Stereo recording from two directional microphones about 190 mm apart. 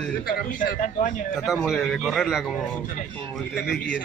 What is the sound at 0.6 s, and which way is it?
Speech, 45° left (ahead or behind).